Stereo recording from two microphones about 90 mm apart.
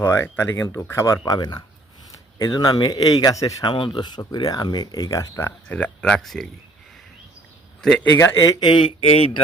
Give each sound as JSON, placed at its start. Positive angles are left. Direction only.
{"t": 0.0, "sound": "speech", "side_deg": 30}
{"t": 1.0, "sound": "speech", "side_deg": 40}
{"t": 1.4, "sound": "speech", "side_deg": 50}
{"t": 3.6, "sound": "speech", "side_deg": 65}
{"t": 5.6, "sound": "speech", "side_deg": 15}
{"t": 7.8, "sound": "a man's voice", "side_deg": 5}
{"t": 8.4, "sound": "speech", "side_deg": 50}
{"t": 8.9, "sound": "speech", "side_deg": 90}